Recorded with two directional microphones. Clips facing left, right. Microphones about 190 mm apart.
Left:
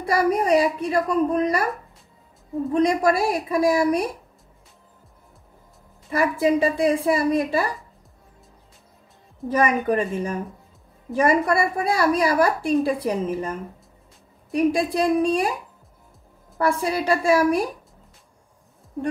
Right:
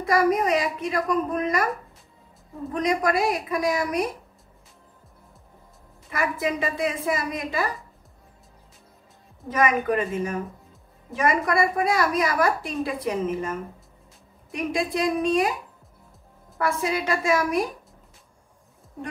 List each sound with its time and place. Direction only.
0.0 s a woman's voice: 30° left (ahead or behind)
2.7 s a woman's voice: 30° left (ahead or behind)
6.0 s a woman's voice: 35° left (ahead or behind)
9.5 s a woman's voice: 30° left (ahead or behind)
16.5 s a woman's voice: 35° left (ahead or behind)